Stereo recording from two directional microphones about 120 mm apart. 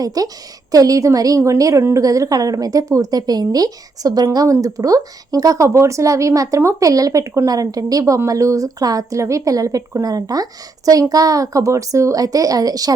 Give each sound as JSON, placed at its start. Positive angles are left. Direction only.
{"t": 0.0, "sound": "a woman's voice", "side_deg": -30}